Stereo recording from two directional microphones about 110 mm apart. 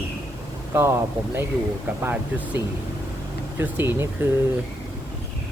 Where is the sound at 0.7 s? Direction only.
20° right (ahead or behind).